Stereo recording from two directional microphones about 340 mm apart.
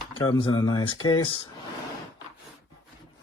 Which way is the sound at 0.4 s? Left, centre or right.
Centre.